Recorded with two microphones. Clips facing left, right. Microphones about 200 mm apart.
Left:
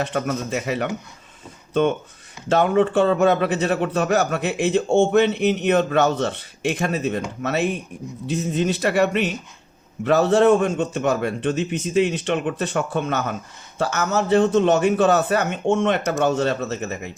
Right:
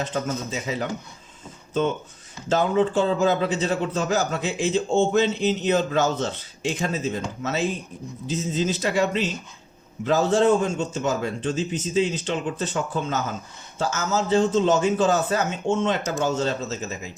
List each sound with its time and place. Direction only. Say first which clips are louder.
0.0 s speech: left 3 dB; 65° left (ahead or behind)
2.5 s a man's voice: left 3 dB; 60° left (ahead or behind)